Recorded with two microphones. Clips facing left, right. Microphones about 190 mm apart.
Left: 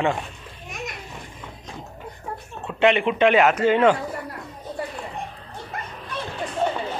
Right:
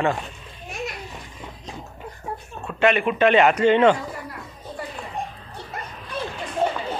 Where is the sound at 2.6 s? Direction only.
20° left (ahead or behind).